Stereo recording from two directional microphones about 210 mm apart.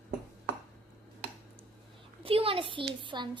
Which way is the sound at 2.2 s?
25° right (ahead or behind).